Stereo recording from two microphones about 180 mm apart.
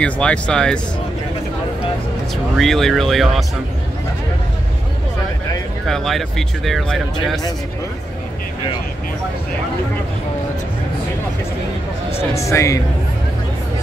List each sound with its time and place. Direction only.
0.0 s speech: 5° left (ahead or behind)
2.5 s speech: centre (ahead or behind)
5.9 s speech: centre (ahead or behind)
12.2 s speech: 15° left (ahead or behind)